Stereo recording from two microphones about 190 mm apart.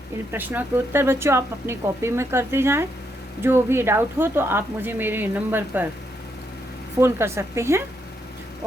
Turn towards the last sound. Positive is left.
turn(degrees=-15)  # may be behind; listen again after turning